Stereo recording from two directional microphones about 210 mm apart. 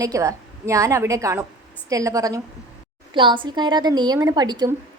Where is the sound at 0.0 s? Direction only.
15° right (ahead or behind).